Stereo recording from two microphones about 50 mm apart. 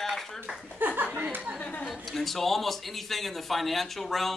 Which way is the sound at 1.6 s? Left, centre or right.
Left.